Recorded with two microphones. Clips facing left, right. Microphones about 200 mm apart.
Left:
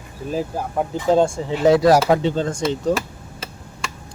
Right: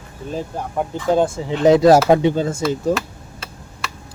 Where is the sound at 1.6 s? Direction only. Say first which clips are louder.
Right 3 dB; 20° right (ahead or behind).